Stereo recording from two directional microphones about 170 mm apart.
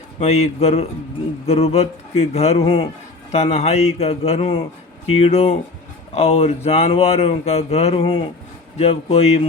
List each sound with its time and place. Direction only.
0.2 s speech: 40° left (ahead or behind)